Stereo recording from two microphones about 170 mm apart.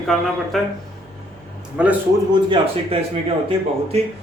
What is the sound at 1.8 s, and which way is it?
Speech, 5° right (ahead or behind).